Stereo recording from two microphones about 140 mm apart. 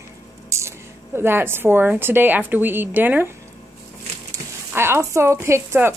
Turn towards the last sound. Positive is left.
turn(degrees=-15)  # may be behind; listen again after turning